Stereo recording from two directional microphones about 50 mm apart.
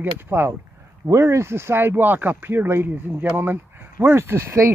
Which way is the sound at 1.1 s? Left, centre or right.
Right.